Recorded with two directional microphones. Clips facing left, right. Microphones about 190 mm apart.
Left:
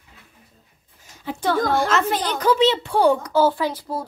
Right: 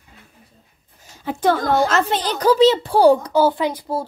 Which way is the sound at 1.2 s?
50° right (ahead or behind).